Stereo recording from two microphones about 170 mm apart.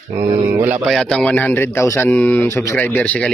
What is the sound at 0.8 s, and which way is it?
Speech, centre (ahead or behind).